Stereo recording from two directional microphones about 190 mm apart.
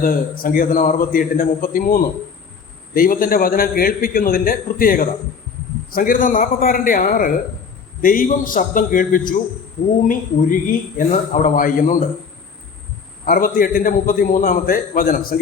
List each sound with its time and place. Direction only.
0.0 s a man's voice: 50° left (ahead or behind)
13.2 s a man's voice: 45° left (ahead or behind)